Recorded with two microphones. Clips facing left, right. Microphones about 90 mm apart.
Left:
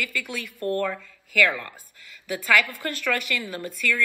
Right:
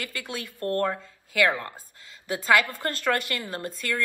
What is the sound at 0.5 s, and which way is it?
Speech, 20° left (ahead or behind).